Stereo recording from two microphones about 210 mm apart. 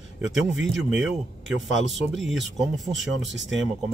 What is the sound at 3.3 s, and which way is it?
Speech, 60° right (ahead or behind).